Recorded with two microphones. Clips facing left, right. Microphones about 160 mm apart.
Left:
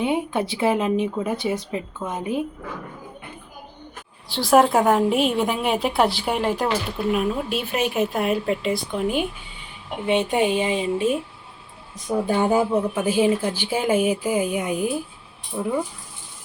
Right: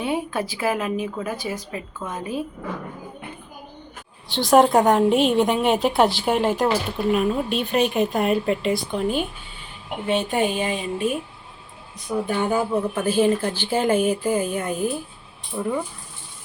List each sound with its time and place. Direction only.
0.0 s speech: 20° left (ahead or behind)
4.3 s a woman's voice: centre (ahead or behind)
10.1 s speech: 20° left (ahead or behind)
12.9 s a woman's voice: 10° left (ahead or behind)